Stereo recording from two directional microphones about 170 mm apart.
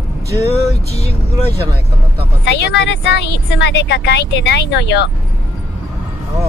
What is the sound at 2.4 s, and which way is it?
A woman's voice, 85° left.